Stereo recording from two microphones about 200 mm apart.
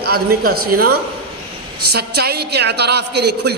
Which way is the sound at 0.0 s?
50° right (ahead or behind).